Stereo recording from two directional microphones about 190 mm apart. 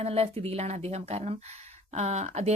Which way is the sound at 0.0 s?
35° right (ahead or behind).